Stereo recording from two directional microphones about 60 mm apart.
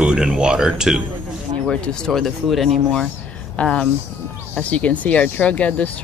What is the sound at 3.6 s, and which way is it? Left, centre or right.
Speech, left.